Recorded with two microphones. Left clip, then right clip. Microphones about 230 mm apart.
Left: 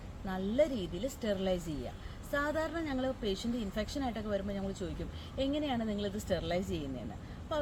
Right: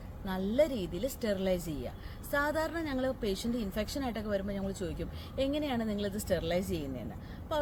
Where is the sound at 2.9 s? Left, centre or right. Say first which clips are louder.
Right 2 dB; centre.